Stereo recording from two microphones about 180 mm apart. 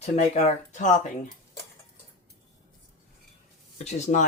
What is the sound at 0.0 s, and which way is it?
Speech, 35° left (ahead or behind).